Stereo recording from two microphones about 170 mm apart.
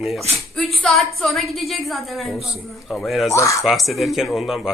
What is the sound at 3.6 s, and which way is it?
Speech, centre (ahead or behind).